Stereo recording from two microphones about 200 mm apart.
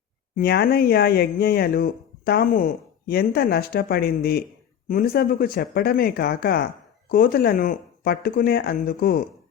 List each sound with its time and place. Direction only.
0.3 s speech: 50° left (ahead or behind)